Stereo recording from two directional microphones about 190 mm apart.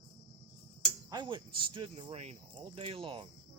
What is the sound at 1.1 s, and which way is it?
Speech, 25° right (ahead or behind).